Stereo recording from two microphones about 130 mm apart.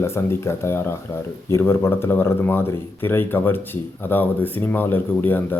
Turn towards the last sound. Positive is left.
turn(degrees=15)  # may be behind; listen again after turning